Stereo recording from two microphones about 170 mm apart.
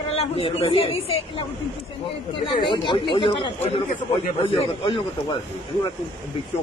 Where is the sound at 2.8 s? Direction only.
30° left (ahead or behind).